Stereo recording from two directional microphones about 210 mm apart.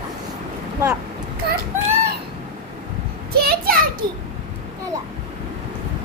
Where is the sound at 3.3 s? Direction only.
45° right (ahead or behind).